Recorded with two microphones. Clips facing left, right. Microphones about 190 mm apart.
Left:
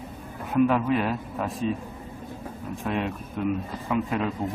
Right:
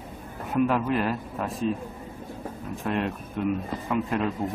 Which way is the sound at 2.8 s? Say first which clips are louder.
Right 1 dB; centre (ahead or behind).